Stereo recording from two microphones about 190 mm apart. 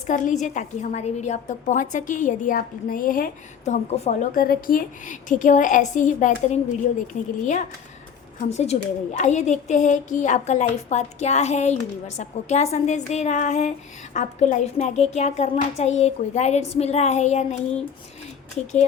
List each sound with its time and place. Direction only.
0.1 s a woman's voice: 40° left (ahead or behind)
3.9 s a woman's voice: 35° left (ahead or behind)
4.4 s a woman's voice: 50° left (ahead or behind)